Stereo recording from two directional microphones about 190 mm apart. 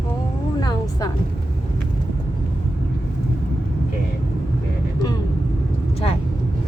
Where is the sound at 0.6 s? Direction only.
20° left (ahead or behind).